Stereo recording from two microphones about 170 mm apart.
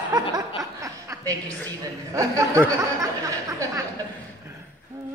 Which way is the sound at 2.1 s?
20° right (ahead or behind).